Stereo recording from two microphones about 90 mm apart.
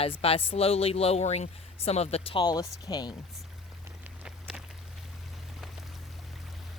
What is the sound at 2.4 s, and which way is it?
Speech, 45° left (ahead or behind).